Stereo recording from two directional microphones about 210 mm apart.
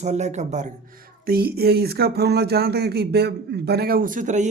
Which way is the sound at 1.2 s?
45° right (ahead or behind).